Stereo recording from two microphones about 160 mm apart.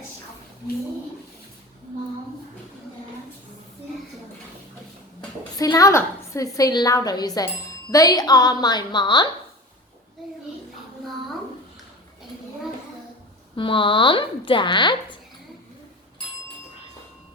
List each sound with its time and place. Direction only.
5.5 s a woman's voice: 20° left (ahead or behind)
13.6 s speech: 30° left (ahead or behind)